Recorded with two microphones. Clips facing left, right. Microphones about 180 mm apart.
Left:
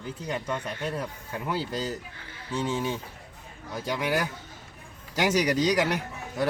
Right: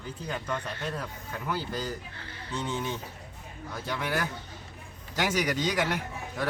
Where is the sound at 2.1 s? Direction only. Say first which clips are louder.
Left 4 dB; 10° left (ahead or behind).